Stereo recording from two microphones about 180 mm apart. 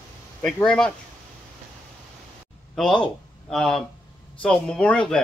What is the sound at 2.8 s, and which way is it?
Speech, 5° left (ahead or behind).